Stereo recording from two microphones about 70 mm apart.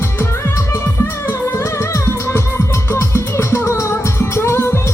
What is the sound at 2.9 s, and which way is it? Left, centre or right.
Music, left.